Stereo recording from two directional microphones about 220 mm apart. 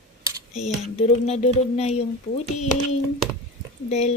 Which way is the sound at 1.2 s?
30° left (ahead or behind).